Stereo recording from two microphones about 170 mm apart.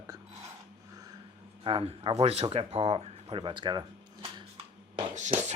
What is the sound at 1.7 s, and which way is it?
Speech, 30° right (ahead or behind).